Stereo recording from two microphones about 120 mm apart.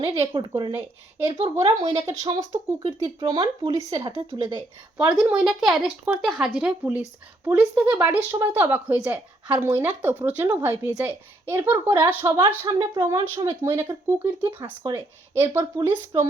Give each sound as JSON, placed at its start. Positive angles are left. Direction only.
{"t": 0.2, "sound": "speech", "side_deg": -40}
{"t": 4.9, "sound": "a woman's voice", "side_deg": -10}
{"t": 12.6, "sound": "speech", "side_deg": -35}
{"t": 13.3, "sound": "speech", "side_deg": -25}